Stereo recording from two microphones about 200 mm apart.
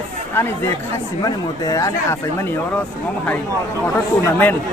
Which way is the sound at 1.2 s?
20° left (ahead or behind).